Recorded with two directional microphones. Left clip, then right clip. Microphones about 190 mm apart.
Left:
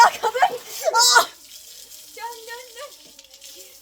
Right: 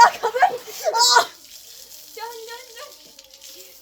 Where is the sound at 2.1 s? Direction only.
30° right (ahead or behind).